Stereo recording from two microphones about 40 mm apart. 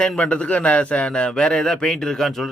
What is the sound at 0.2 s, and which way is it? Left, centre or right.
A man's voice, left.